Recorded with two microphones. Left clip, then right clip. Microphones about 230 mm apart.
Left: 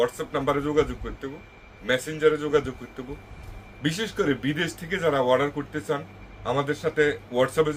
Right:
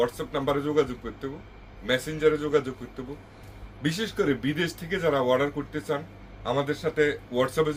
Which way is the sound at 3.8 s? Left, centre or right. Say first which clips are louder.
Left 1 dB; centre.